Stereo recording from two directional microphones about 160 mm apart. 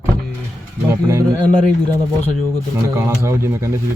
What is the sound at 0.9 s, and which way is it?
Speech, 15° right (ahead or behind).